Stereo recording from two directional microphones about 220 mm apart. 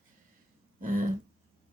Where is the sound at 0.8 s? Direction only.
35° right (ahead or behind).